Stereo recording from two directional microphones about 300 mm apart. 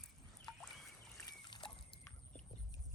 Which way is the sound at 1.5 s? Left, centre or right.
Centre.